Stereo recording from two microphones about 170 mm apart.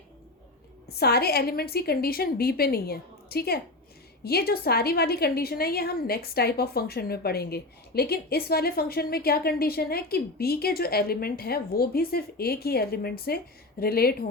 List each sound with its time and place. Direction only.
0.9 s a woman's voice: 65° left (ahead or behind)